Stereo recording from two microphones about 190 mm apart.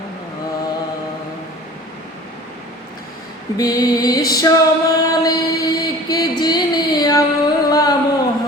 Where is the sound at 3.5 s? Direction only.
20° left (ahead or behind).